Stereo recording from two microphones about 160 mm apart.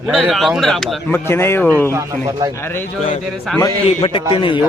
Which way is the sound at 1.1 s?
15° left (ahead or behind).